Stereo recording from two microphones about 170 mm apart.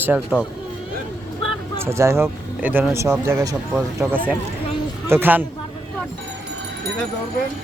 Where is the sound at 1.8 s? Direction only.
15° right (ahead or behind).